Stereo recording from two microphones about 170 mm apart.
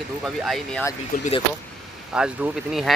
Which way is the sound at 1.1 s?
55° left (ahead or behind).